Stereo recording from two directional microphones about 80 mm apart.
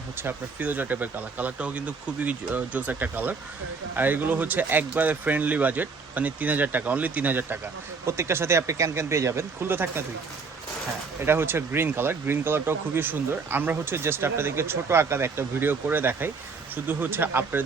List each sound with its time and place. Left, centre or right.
0.2 s speech: right
8.0 s speech: right
11.3 s speech: right